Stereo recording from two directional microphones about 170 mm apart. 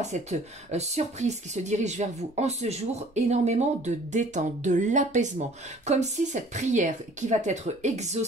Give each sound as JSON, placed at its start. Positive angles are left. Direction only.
{"t": 0.0, "sound": "speech", "side_deg": -40}